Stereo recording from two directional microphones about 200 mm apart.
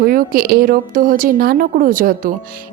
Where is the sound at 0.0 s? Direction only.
45° right (ahead or behind).